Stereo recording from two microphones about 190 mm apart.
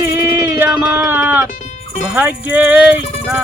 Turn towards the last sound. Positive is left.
turn(degrees=-5)  # may be behind; listen again after turning